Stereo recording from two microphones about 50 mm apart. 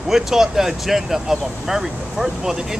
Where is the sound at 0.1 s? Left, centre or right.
Centre.